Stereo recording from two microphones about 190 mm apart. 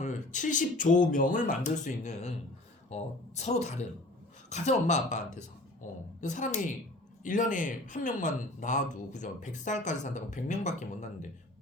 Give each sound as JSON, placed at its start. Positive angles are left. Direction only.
{"t": 0.0, "sound": "speech", "side_deg": 40}